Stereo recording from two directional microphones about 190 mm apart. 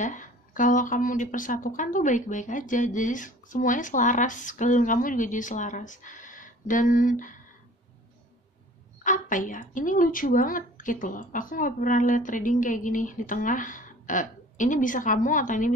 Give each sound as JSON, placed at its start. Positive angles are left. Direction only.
{"t": 0.0, "sound": "speech", "side_deg": 40}
{"t": 9.0, "sound": "speech", "side_deg": 45}